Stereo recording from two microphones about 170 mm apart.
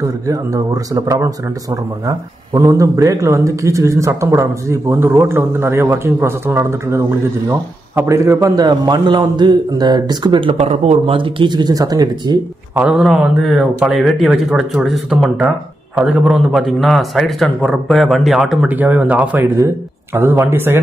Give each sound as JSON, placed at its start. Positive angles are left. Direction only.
{"t": 0.9, "sound": "a man's voice", "side_deg": -20}
{"t": 2.5, "sound": "a man's voice", "side_deg": -20}
{"t": 12.7, "sound": "a man's voice", "side_deg": -5}